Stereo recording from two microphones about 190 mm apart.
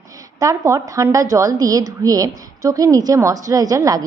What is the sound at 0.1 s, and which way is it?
A woman's voice, 15° right (ahead or behind).